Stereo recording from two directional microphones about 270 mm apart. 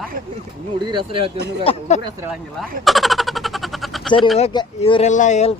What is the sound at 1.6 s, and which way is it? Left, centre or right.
Speech, left.